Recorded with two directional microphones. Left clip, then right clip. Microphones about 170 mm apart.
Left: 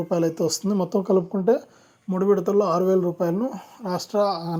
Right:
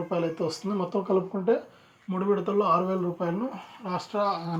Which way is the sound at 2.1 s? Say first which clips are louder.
Left 6 dB; 35° left (ahead or behind).